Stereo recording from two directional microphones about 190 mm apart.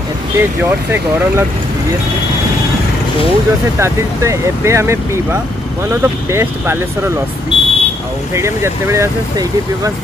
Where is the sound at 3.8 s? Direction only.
15° right (ahead or behind).